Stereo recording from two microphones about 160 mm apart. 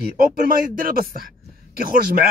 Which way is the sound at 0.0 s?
60° right (ahead or behind).